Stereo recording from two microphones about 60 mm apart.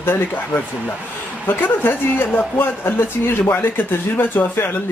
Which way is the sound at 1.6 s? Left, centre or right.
Left.